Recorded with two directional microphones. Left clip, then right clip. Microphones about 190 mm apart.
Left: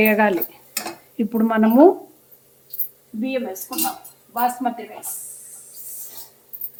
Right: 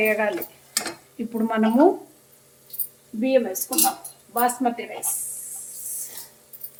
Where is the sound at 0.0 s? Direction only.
55° left (ahead or behind).